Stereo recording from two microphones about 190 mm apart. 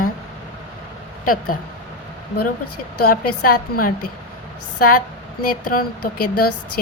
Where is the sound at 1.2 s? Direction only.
50° left (ahead or behind).